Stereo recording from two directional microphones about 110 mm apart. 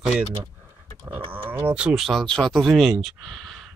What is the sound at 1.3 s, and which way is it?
Speech, 20° right (ahead or behind).